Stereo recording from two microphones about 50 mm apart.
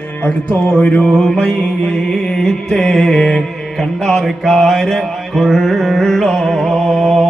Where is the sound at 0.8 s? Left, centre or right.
Centre.